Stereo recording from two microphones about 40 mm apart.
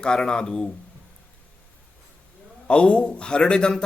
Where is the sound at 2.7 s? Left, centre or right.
Left.